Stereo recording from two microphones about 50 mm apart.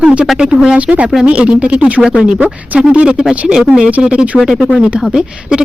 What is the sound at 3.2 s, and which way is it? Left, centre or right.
Speech, centre.